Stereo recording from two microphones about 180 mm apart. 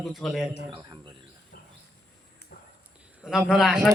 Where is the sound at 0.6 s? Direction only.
25° right (ahead or behind).